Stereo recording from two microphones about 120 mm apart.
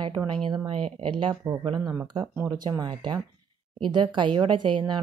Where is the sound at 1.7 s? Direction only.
35° right (ahead or behind).